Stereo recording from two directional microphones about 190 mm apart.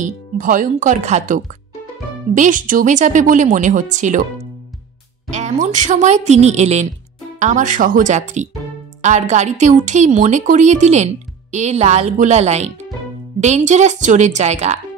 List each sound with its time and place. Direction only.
0.0 s a woman's voice: 45° right (ahead or behind)
5.3 s a woman's voice: 40° right (ahead or behind)